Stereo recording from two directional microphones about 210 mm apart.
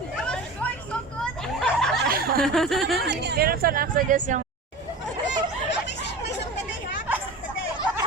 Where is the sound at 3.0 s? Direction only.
50° right (ahead or behind).